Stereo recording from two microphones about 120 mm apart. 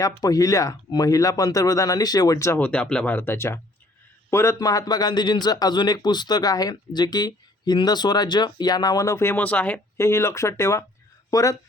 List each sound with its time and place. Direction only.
0.0 s speech: 30° left (ahead or behind)
2.6 s a man's voice: 10° left (ahead or behind)
10.0 s speech: 25° left (ahead or behind)